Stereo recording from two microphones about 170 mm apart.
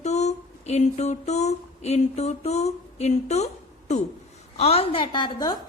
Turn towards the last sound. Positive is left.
turn(degrees=25)  # may be behind; listen again after turning